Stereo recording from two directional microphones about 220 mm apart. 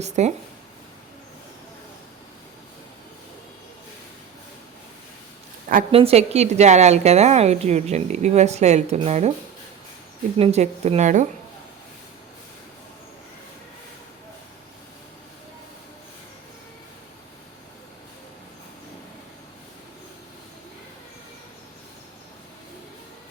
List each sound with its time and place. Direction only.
0.0 s speech: 30° right (ahead or behind)
5.9 s a woman's voice: 25° right (ahead or behind)
10.3 s a woman's voice: 30° right (ahead or behind)